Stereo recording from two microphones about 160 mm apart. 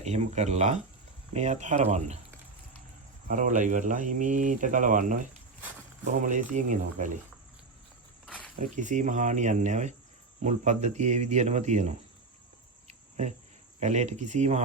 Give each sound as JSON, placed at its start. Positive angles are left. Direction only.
{"t": 0.0, "sound": "speech", "side_deg": -40}
{"t": 3.2, "sound": "speech", "side_deg": -55}
{"t": 8.5, "sound": "speech", "side_deg": -50}
{"t": 12.9, "sound": "cricket", "side_deg": -45}
{"t": 13.7, "sound": "speech", "side_deg": -45}